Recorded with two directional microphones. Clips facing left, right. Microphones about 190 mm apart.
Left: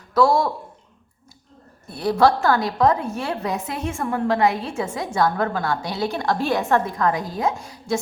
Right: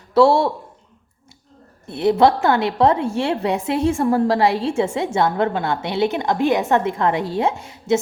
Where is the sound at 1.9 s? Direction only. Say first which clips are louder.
Right 3 dB; 25° right (ahead or behind).